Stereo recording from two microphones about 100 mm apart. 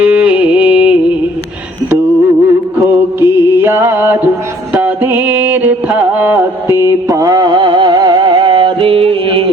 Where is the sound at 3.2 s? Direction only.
25° right (ahead or behind).